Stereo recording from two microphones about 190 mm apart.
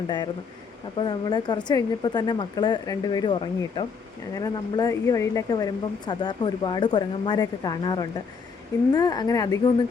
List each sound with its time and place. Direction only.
0.9 s speech: 25° left (ahead or behind)